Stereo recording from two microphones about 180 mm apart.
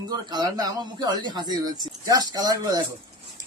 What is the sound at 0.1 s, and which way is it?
Speech, 20° right (ahead or behind).